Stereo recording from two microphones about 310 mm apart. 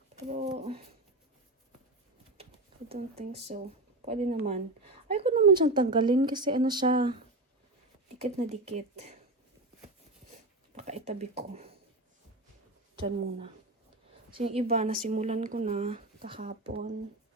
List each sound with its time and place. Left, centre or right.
0.4 s bird: centre
2.4 s a sound: centre
2.9 s a woman's voice: centre
8.2 s speech: right
10.8 s speech: right
14.3 s speech: centre